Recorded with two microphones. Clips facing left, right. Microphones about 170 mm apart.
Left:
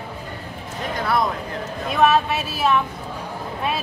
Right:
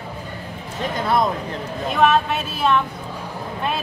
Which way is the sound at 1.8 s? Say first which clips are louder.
Even; 5° left (ahead or behind).